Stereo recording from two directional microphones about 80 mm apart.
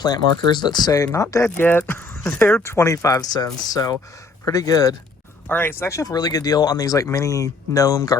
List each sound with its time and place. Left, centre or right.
0.0 s speech: left
1.1 s speech: left
1.5 s speech: left
2.6 s speech: left
5.5 s speech: left
5.9 s speech: left